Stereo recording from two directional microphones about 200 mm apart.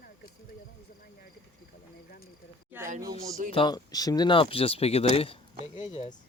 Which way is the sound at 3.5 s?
20° left (ahead or behind).